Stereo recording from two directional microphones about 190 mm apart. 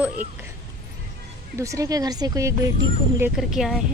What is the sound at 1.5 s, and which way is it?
Speech, 15° right (ahead or behind).